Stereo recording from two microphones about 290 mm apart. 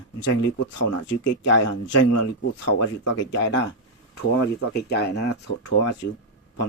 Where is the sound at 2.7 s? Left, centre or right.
Left.